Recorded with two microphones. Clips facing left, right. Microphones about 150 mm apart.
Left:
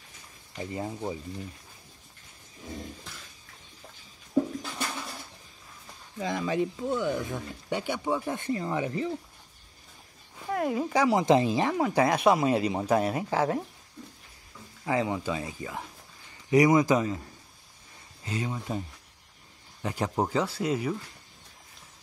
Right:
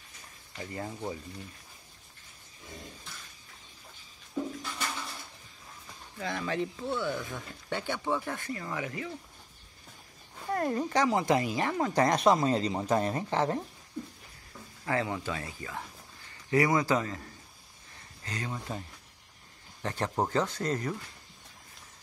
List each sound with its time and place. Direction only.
0.6 s speech: 20° left (ahead or behind)
6.1 s speech: 15° left (ahead or behind)
10.4 s speech: 5° left (ahead or behind)
14.9 s speech: 15° left (ahead or behind)
18.2 s speech: 10° left (ahead or behind)